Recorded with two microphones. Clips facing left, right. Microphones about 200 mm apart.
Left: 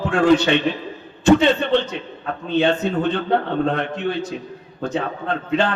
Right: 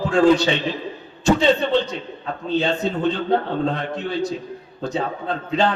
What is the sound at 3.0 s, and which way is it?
A man's voice, 60° left (ahead or behind).